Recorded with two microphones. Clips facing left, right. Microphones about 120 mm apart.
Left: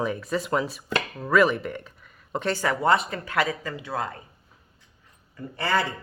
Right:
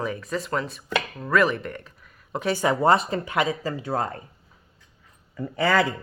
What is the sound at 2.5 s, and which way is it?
Speech, 25° right (ahead or behind).